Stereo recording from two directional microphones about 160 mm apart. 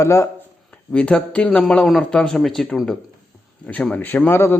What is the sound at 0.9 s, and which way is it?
Speech, 5° left (ahead or behind).